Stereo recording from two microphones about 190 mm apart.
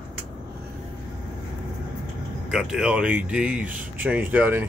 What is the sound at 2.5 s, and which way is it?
Speech, 5° right (ahead or behind).